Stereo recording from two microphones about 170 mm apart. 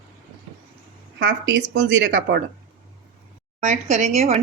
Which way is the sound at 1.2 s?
90° right.